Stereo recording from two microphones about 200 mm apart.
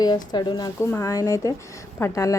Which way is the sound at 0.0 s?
20° left (ahead or behind).